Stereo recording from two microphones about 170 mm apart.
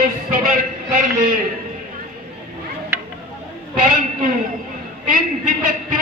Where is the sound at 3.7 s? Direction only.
50° right (ahead or behind).